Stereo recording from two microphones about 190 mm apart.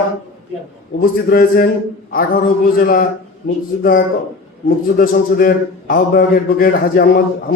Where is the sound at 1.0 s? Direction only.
50° left (ahead or behind).